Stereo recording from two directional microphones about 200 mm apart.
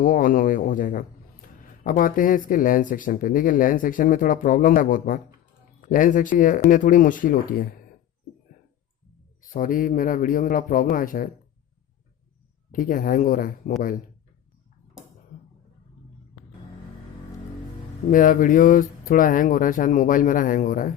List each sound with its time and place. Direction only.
0.0 s a man's voice: 45° left (ahead or behind)
9.4 s a man's voice: 45° left (ahead or behind)
12.7 s a man's voice: 45° left (ahead or behind)
18.1 s a man's voice: 40° left (ahead or behind)